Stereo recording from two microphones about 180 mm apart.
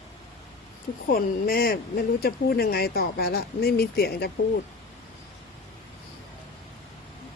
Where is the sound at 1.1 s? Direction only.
55° left (ahead or behind).